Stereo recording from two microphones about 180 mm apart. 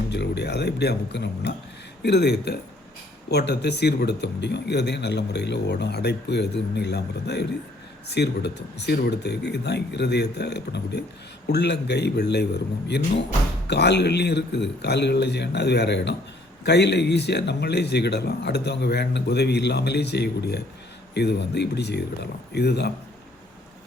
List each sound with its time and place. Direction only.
0.1 s speech: 70° left (ahead or behind)